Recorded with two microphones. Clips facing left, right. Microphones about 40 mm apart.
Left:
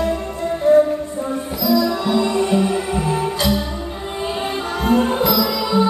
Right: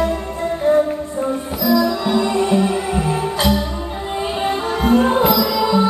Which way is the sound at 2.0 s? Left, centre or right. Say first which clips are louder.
Right 1 dB; centre.